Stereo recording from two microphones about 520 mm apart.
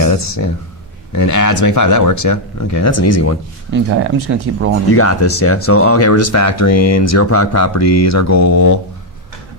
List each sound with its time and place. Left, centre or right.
0.0 s a sound: left
1.1 s speech: left
4.0 s speech: right
4.9 s speech: left